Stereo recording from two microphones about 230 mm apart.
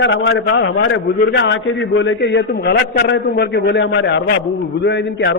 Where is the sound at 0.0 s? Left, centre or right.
Left.